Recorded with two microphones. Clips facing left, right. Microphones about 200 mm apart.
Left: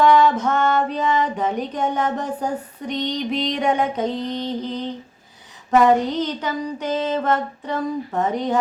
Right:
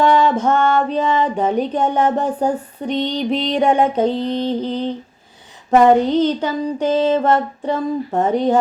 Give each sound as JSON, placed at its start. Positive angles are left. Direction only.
{"t": 0.0, "sound": "music", "side_deg": -30}